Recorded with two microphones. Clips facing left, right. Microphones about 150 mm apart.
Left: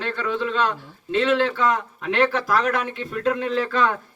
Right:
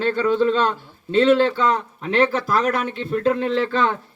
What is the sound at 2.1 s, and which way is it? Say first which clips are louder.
Speech: right 2 dB; 30° right (ahead or behind).